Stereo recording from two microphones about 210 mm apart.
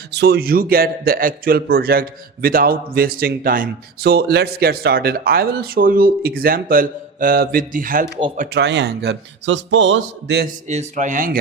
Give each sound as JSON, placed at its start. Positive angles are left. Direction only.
{"t": 0.1, "sound": "a man's voice", "side_deg": -50}
{"t": 8.5, "sound": "a man's voice", "side_deg": -55}
{"t": 10.7, "sound": "speech", "side_deg": -35}